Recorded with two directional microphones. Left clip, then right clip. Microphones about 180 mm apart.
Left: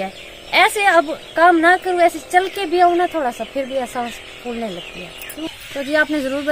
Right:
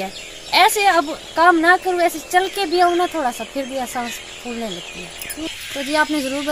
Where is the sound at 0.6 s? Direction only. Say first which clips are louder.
Left 1 dB; 40° left (ahead or behind).